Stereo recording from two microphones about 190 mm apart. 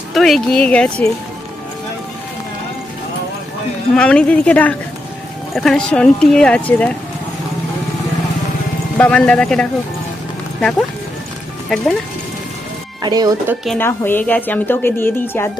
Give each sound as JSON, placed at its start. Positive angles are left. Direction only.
{"t": 0.1, "sound": "speech", "side_deg": 0}
{"t": 3.9, "sound": "a woman's voice", "side_deg": 5}
{"t": 9.0, "sound": "speech", "side_deg": 5}
{"t": 13.0, "sound": "speech", "side_deg": -20}
{"t": 13.7, "sound": "a woman's voice", "side_deg": 10}